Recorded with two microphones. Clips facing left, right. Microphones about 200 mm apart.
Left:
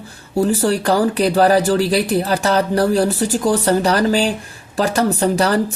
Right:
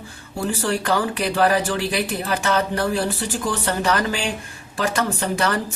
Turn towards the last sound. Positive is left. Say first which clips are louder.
# left 6 dB
turn(degrees=35)  # may be behind; listen again after turning